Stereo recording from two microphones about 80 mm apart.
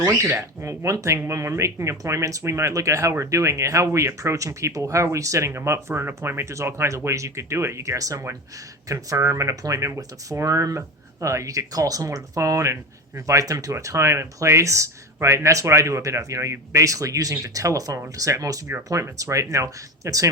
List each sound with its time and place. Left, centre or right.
0.2 s speech: right